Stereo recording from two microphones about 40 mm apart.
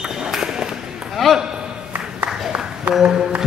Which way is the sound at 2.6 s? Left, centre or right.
Centre.